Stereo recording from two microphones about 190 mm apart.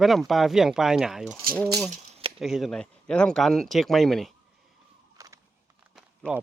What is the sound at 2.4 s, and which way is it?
Speech, centre (ahead or behind).